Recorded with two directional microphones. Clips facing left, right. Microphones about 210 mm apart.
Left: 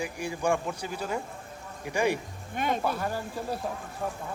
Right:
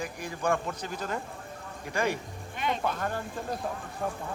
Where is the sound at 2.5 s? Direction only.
50° left (ahead or behind).